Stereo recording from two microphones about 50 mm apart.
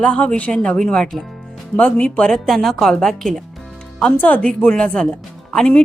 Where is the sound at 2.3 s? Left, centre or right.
Centre.